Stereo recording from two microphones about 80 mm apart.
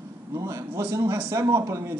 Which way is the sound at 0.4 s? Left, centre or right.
Right.